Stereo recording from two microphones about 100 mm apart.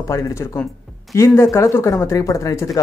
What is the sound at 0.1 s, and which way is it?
Speech, 30° left (ahead or behind).